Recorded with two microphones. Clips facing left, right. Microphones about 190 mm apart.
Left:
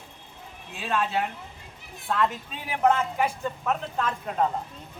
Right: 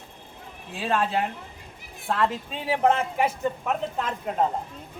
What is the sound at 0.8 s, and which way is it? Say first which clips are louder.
A woman's voice: right 2 dB; 30° right (ahead or behind).